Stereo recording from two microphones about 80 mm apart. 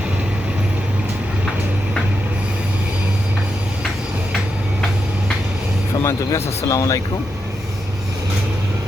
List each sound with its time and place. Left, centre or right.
6.0 s speech: left